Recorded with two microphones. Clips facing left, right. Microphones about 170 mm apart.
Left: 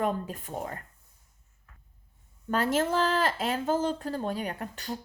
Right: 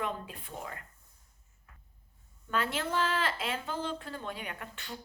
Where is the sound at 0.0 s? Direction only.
45° left (ahead or behind).